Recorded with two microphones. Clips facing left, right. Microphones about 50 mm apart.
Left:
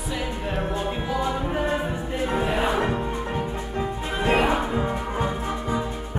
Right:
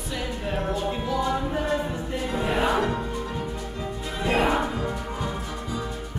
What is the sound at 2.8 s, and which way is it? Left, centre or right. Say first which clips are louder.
Music: left 2 dB; left.